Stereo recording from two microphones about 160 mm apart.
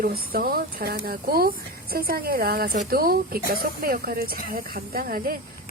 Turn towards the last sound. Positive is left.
turn(degrees=-65)  # may be behind; listen again after turning